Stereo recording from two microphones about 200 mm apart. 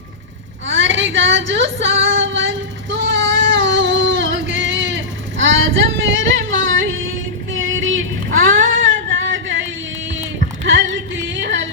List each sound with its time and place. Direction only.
0.7 s female singing: 65° right (ahead or behind)
3.2 s a sound: 65° right (ahead or behind)
7.5 s child singing: 80° right
8.3 s female singing: 40° right (ahead or behind)
9.0 s singing: 70° right (ahead or behind)
10.7 s music: 70° right (ahead or behind)